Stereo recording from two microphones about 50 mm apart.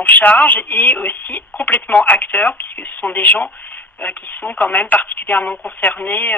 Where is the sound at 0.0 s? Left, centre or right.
Left.